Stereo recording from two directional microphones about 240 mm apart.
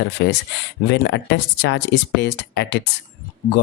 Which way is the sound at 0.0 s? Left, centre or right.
Left.